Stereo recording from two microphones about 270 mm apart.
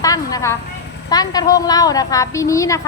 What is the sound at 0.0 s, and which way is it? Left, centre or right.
A woman's voice, centre.